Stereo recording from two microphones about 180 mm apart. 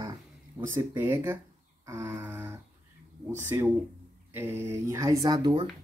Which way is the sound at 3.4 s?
15° right (ahead or behind).